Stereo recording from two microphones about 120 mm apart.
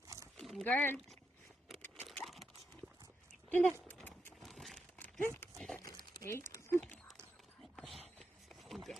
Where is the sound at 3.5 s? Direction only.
15° left (ahead or behind).